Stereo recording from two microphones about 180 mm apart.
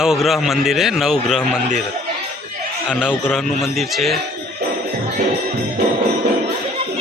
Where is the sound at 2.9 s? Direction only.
10° left (ahead or behind).